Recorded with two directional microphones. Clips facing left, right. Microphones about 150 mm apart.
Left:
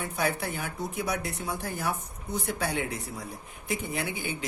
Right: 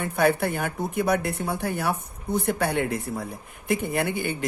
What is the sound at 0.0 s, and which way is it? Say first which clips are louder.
Speech: right 8 dB; 60° right (ahead or behind).